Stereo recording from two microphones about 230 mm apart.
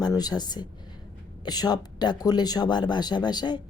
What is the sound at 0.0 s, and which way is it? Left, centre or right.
Speech, centre.